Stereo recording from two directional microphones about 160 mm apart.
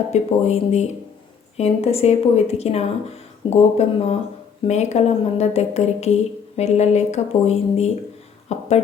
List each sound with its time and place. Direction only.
0.1 s a woman's voice: 45° left (ahead or behind)